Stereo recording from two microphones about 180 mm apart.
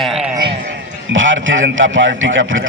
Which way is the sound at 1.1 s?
90° right.